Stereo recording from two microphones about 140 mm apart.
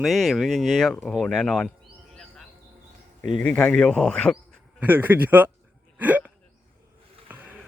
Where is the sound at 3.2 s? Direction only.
60° right (ahead or behind).